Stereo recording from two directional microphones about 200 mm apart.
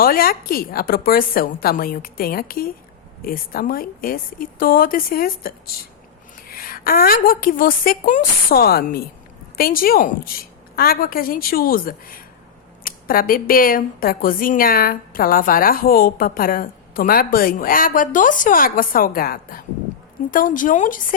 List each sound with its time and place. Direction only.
0.0 s speech: 50° left (ahead or behind)